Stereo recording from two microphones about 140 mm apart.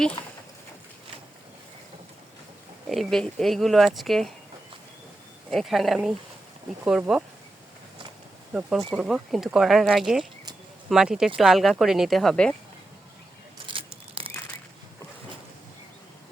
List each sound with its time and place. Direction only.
2.9 s speech: centre (ahead or behind)
5.5 s speech: centre (ahead or behind)
8.9 s speech: centre (ahead or behind)
13.7 s a sound: 40° right (ahead or behind)